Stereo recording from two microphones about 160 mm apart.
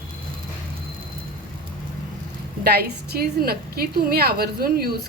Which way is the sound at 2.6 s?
75° right (ahead or behind).